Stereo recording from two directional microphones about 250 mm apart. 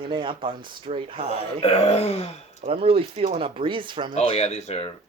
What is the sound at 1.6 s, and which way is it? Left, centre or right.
Speech, left.